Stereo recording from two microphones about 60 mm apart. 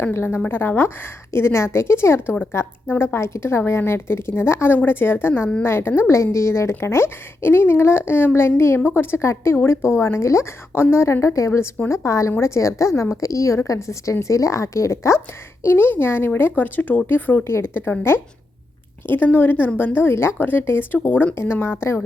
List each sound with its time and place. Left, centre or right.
0.1 s a woman's voice: left
15.6 s a woman's voice: left
19.0 s a woman's voice: left